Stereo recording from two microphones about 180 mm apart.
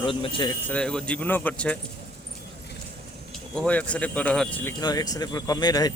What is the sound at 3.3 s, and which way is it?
Speech, 5° left (ahead or behind).